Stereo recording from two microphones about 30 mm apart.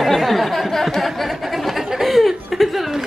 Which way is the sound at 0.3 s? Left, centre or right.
Centre.